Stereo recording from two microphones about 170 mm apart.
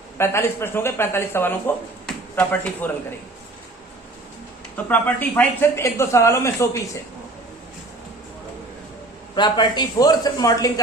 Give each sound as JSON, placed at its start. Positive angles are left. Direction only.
{"t": 0.2, "sound": "speech", "side_deg": 15}
{"t": 4.9, "sound": "speech", "side_deg": 10}
{"t": 9.3, "sound": "speech", "side_deg": 25}